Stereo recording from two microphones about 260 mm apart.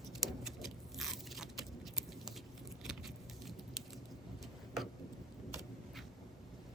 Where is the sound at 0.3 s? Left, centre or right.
Centre.